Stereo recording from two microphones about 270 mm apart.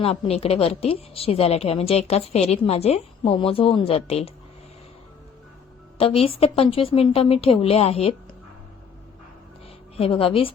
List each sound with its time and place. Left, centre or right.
0.0 s a woman's voice: left
6.0 s a woman's voice: left
10.0 s a woman's voice: left